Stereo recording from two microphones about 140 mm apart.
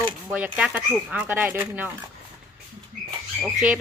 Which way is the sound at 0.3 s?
10° right (ahead or behind).